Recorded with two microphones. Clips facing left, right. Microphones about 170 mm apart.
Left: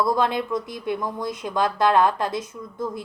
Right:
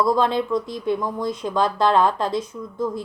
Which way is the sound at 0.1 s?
15° left (ahead or behind).